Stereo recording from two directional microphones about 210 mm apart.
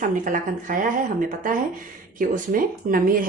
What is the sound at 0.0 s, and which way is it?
Speech, 40° right (ahead or behind).